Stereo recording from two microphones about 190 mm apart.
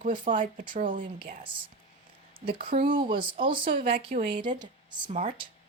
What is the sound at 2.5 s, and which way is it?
Speech, 50° right (ahead or behind).